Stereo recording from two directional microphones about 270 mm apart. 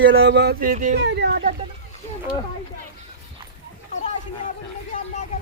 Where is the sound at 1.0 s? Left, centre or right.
Right.